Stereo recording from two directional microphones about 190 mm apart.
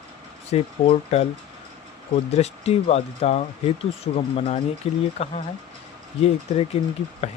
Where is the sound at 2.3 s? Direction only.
35° left (ahead or behind).